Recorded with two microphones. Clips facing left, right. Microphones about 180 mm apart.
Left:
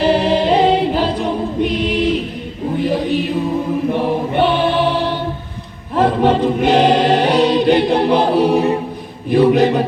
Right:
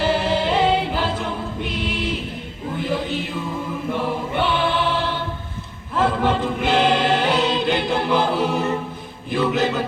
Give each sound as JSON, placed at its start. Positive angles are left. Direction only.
{"t": 0.0, "sound": "choir", "side_deg": 20}
{"t": 2.7, "sound": "a sound", "side_deg": 20}
{"t": 3.8, "sound": "choir", "side_deg": 20}
{"t": 6.1, "sound": "choir", "side_deg": 20}
{"t": 9.3, "sound": "mantra", "side_deg": 20}